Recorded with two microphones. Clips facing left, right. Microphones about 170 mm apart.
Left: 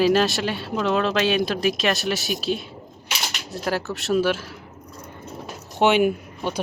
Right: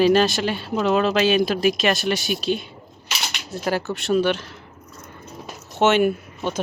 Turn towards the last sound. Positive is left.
turn(degrees=10)  # may be behind; listen again after turning